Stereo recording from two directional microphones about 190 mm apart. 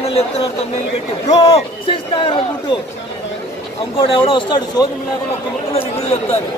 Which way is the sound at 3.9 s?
25° left (ahead or behind).